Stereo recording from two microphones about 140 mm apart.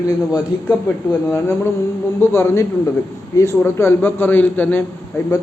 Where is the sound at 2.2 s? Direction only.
20° left (ahead or behind).